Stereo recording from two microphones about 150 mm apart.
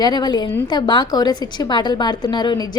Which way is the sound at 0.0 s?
30° left (ahead or behind).